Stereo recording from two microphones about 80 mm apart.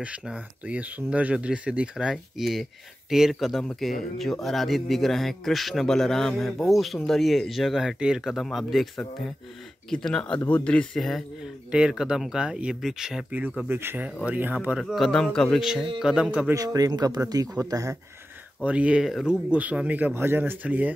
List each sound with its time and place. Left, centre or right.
0.0 s speech: centre
11.0 s speech: centre
13.7 s speech: right
14.8 s speech: centre
15.6 s speech: centre
16.5 s speech: right
18.6 s speech: centre